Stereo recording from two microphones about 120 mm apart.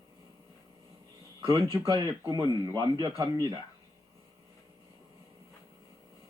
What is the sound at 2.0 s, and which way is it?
Speech, 35° right (ahead or behind).